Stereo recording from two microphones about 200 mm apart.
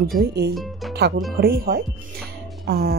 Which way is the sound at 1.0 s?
55° right (ahead or behind).